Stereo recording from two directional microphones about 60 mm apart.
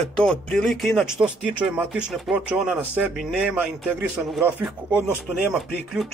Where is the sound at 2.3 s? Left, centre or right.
Centre.